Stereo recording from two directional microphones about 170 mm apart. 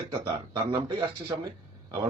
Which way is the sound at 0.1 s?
35° right (ahead or behind).